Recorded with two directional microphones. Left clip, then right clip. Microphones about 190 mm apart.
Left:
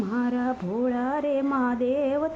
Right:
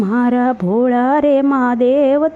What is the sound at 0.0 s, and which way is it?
Speech, 45° right (ahead or behind).